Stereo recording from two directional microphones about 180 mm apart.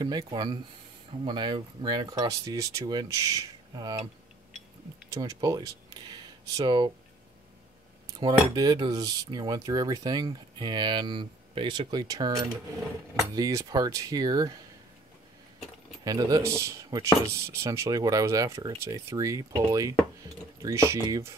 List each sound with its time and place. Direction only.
0.0 s cutlery: 20° right (ahead or behind)
5.1 s speech: 20° right (ahead or behind)
8.2 s cutlery: 25° right (ahead or behind)
16.0 s cutlery: 20° right (ahead or behind)
20.6 s speech: 15° right (ahead or behind)